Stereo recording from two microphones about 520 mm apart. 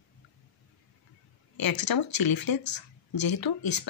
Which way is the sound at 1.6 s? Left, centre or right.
Left.